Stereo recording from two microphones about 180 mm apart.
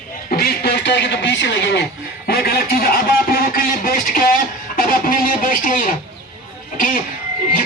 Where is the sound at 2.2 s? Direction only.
60° left (ahead or behind).